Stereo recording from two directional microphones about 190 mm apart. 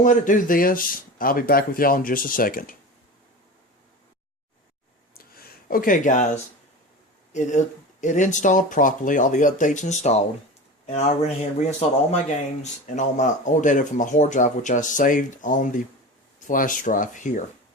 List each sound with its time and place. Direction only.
0.0 s speech: 45° left (ahead or behind)
5.1 s a sound: 50° left (ahead or behind)
8.0 s speech: 40° left (ahead or behind)